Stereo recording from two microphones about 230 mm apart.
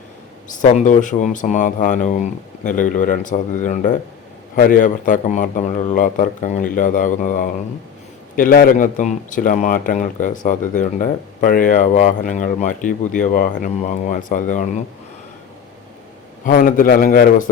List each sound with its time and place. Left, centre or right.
0.4 s speech: left
16.5 s speech: left